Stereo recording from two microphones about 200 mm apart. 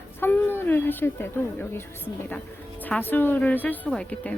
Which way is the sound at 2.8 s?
10° left (ahead or behind).